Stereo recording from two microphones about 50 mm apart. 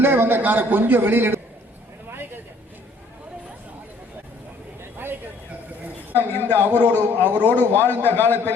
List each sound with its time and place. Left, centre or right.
0.0 s a man's voice: right
2.0 s vehicle: right
6.1 s a man's voice: left